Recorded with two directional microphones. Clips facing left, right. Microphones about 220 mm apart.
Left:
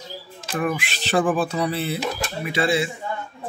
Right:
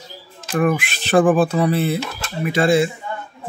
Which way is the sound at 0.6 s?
50° right (ahead or behind).